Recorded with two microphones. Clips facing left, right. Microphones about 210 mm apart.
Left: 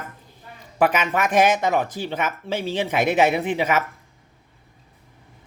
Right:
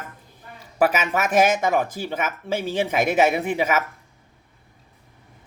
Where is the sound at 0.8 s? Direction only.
5° right (ahead or behind).